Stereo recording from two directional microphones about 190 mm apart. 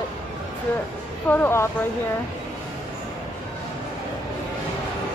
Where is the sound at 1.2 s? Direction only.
10° left (ahead or behind).